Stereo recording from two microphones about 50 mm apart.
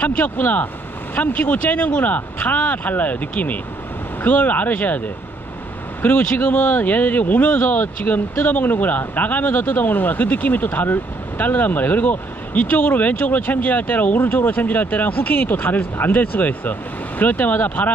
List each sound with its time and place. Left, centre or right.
0.0 s speech: left
6.0 s speech: left